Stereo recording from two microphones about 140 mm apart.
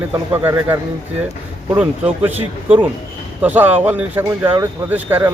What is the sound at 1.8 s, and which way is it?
Speech, 10° right (ahead or behind).